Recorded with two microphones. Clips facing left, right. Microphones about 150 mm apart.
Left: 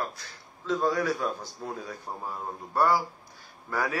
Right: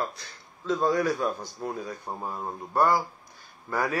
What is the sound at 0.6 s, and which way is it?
A man's voice, 15° right (ahead or behind).